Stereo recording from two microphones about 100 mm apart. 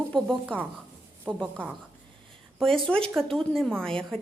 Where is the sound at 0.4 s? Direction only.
15° right (ahead or behind).